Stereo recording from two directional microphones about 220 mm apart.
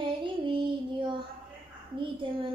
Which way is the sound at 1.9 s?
25° right (ahead or behind).